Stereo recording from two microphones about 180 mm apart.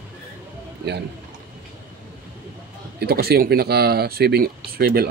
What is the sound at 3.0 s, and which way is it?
Speech, 60° right (ahead or behind).